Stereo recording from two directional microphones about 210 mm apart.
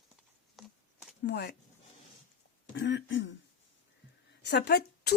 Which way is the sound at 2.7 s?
60° left (ahead or behind).